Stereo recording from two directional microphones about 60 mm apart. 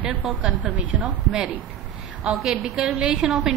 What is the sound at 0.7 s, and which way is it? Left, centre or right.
Speech, right.